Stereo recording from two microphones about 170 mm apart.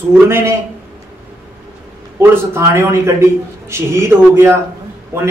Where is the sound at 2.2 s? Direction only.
15° right (ahead or behind).